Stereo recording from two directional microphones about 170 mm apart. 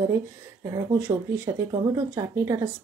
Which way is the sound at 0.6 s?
15° right (ahead or behind).